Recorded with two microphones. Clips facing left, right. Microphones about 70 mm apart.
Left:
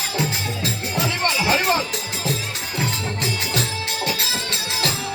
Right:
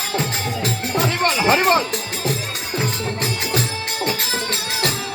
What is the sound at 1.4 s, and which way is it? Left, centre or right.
Music, right.